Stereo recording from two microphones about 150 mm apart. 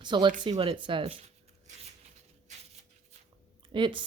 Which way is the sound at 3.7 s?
35° right (ahead or behind).